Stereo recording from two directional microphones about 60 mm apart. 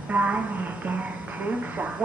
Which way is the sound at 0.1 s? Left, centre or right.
Right.